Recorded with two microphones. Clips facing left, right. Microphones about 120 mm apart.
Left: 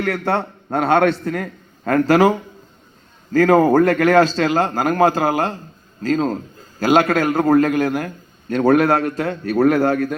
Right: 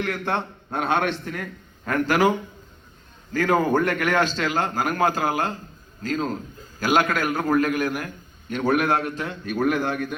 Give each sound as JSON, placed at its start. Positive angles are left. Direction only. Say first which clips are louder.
{"t": 0.3, "sound": "a man's voice", "louder": "left 6 dB", "side_deg": 35}
{"t": 3.3, "sound": "a man's voice", "louder": "left 8 dB", "side_deg": 35}